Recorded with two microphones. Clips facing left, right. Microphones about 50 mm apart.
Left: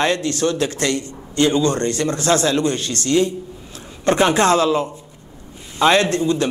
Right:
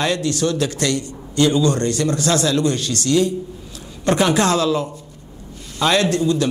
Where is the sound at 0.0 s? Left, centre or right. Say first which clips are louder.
Left 1 dB; left.